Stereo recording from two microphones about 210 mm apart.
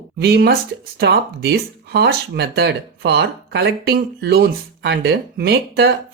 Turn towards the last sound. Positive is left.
turn(degrees=-50)  # may be behind; listen again after turning